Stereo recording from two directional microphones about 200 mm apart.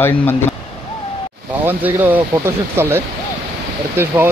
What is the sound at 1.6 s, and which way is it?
Speech, 10° right (ahead or behind).